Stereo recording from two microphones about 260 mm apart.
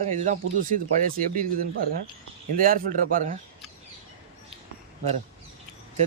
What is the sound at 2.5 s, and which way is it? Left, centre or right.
Speech, right.